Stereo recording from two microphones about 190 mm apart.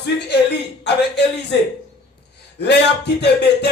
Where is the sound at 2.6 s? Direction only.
60° left (ahead or behind).